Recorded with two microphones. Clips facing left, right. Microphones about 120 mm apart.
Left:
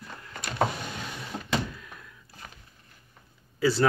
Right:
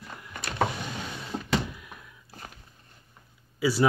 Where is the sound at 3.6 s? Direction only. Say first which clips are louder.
Even; 10° right (ahead or behind).